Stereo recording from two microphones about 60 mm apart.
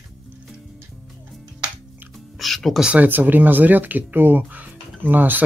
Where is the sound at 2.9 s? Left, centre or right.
Right.